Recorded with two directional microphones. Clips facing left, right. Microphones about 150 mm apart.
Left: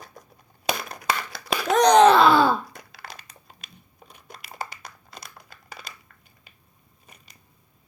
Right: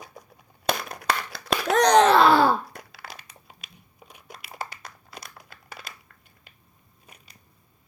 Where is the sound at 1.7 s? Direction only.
20° left (ahead or behind).